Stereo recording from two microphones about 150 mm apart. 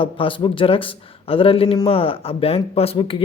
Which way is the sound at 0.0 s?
35° left (ahead or behind).